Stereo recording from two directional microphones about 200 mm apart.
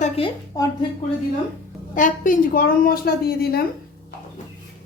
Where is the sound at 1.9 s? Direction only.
40° left (ahead or behind).